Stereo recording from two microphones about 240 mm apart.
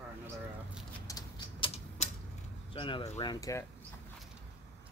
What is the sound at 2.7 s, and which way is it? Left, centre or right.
Speech, left.